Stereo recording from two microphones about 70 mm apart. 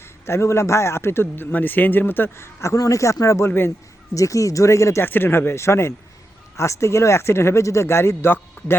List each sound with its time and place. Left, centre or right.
0.0 s a man's voice: left
2.7 s speech: left
4.1 s speech: left
5.0 s a man's voice: left